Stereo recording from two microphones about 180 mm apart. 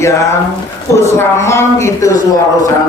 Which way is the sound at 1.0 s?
15° left (ahead or behind).